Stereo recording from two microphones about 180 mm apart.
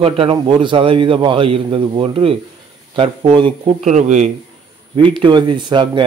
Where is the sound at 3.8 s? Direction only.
40° right (ahead or behind).